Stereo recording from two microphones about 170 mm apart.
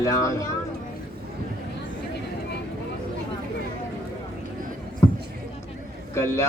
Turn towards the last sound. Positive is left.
turn(degrees=15)  # may be behind; listen again after turning